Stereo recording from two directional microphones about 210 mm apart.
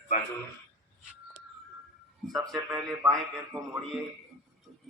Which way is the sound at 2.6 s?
5° right (ahead or behind).